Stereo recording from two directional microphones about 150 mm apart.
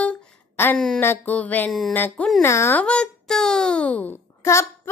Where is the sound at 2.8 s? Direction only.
5° left (ahead or behind).